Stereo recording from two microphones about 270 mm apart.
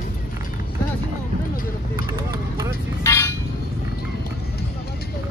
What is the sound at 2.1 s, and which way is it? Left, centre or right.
Vehicle, centre.